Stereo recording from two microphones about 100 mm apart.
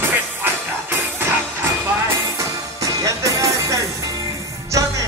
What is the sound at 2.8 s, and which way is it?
Music, 35° right (ahead or behind).